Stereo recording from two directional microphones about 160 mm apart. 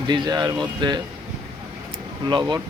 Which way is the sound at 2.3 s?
30° right (ahead or behind).